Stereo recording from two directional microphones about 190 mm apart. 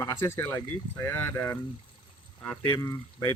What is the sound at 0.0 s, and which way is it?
Speech, 15° left (ahead or behind).